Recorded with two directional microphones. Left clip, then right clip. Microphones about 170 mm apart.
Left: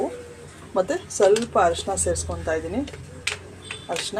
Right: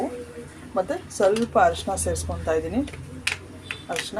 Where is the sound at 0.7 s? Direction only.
20° left (ahead or behind).